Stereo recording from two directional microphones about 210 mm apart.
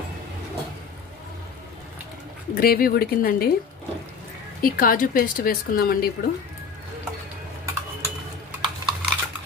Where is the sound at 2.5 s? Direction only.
45° left (ahead or behind).